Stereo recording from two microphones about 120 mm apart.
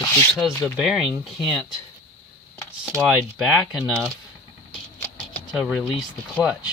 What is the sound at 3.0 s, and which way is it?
Speech, 10° right (ahead or behind).